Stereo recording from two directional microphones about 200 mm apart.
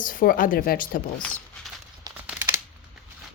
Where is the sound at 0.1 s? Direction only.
45° left (ahead or behind).